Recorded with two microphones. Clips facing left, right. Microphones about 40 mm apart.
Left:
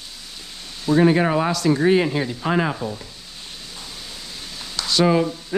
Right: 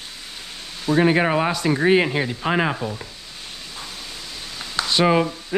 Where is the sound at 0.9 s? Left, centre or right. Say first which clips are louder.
Left 1 dB; centre.